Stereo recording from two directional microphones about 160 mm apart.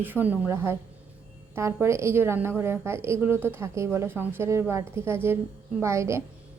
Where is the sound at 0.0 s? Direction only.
10° right (ahead or behind).